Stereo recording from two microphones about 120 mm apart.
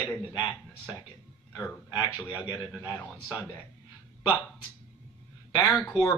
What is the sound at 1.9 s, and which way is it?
Speech, 35° left (ahead or behind).